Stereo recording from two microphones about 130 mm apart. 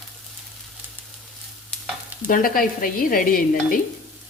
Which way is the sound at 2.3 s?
90° left.